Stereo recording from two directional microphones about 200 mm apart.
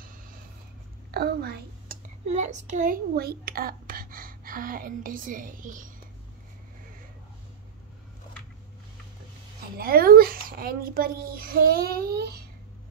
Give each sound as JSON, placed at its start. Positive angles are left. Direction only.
{"t": 1.1, "sound": "a woman's voice", "side_deg": -50}
{"t": 2.3, "sound": "a child's voice", "side_deg": -35}
{"t": 9.8, "sound": "a child's voice", "side_deg": -50}